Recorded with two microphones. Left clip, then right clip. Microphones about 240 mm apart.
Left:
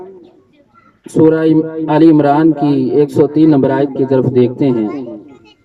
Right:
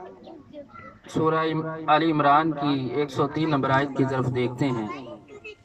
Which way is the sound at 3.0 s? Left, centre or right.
Left.